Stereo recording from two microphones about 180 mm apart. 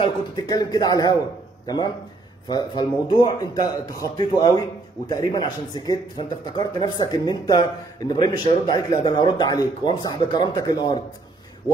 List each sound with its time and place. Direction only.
0.0 s a man's voice: 20° left (ahead or behind)
2.4 s a man's voice: 25° left (ahead or behind)